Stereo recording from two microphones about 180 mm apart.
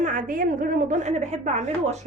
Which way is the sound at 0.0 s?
45° right (ahead or behind).